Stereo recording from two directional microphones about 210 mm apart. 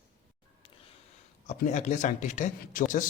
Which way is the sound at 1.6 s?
35° left (ahead or behind).